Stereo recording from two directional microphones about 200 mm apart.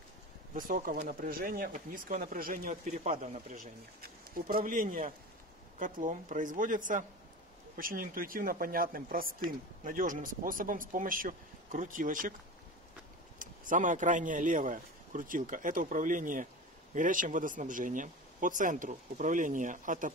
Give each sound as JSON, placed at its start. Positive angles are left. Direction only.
{"t": 0.6, "sound": "speech", "side_deg": -45}
{"t": 13.4, "sound": "speech", "side_deg": -40}